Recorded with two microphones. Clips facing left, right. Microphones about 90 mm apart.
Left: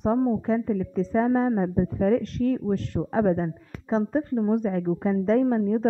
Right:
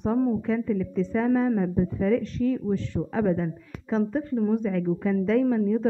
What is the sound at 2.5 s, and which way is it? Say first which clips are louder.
Speech: left 1 dB; 55° left (ahead or behind).